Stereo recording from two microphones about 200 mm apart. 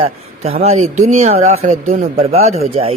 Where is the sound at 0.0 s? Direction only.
30° right (ahead or behind).